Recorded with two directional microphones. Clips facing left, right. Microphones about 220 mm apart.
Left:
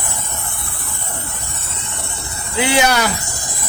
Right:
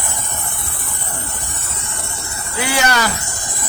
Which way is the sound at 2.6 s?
20° left (ahead or behind).